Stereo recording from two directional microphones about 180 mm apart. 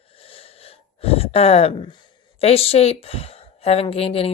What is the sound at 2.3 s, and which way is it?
A woman's voice, 35° left (ahead or behind).